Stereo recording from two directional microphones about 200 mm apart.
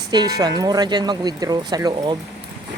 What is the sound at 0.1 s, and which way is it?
Speech, 20° right (ahead or behind).